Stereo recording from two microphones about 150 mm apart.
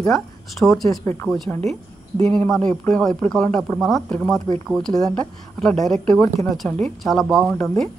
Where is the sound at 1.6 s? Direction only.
50° right (ahead or behind).